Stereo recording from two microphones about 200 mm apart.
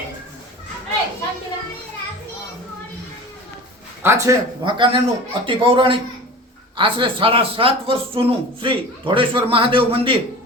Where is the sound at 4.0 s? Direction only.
10° right (ahead or behind).